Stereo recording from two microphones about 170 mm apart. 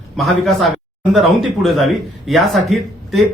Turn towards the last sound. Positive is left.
turn(degrees=0)  # may be behind; listen again after turning